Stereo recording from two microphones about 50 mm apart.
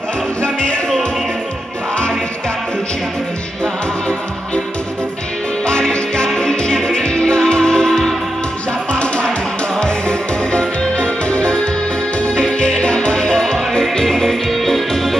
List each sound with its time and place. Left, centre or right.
0.4 s music: centre
5.7 s music: centre